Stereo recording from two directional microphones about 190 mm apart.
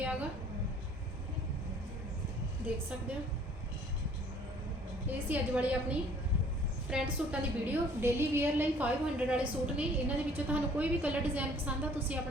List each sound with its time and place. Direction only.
0.0 s a sound: 5° right (ahead or behind)
2.7 s a woman's voice: 10° right (ahead or behind)
5.0 s a woman's voice: 10° right (ahead or behind)